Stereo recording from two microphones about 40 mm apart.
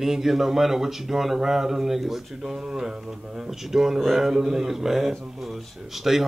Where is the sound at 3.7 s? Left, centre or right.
Centre.